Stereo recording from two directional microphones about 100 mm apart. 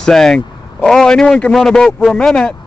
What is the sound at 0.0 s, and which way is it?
Speech, 5° left (ahead or behind).